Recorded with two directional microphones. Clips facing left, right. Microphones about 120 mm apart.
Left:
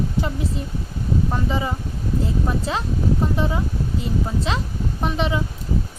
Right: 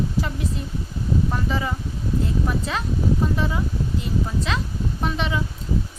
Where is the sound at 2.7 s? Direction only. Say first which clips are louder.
Left 2 dB; 25° left (ahead or behind).